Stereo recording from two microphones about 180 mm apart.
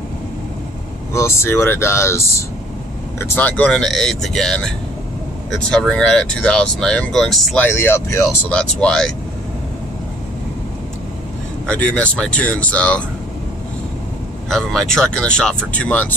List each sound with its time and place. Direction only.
1.1 s speech: 15° left (ahead or behind)
7.7 s speech: 15° left (ahead or behind)
11.6 s speech: 5° left (ahead or behind)
14.5 s speech: centre (ahead or behind)